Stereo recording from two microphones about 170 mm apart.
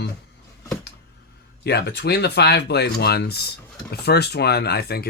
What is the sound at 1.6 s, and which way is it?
Speech, 80° left.